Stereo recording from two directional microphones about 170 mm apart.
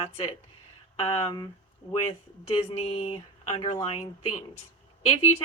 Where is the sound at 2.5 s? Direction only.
35° left (ahead or behind).